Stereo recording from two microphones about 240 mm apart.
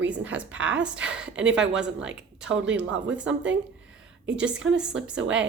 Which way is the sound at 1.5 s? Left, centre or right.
Centre.